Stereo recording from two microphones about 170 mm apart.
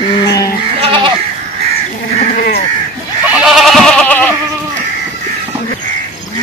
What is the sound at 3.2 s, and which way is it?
Goat, 5° right (ahead or behind).